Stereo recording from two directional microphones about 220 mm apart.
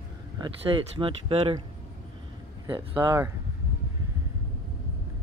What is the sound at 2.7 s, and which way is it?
Speech, 15° right (ahead or behind).